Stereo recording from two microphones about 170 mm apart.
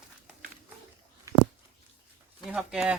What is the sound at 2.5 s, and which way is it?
Speech, 5° right (ahead or behind).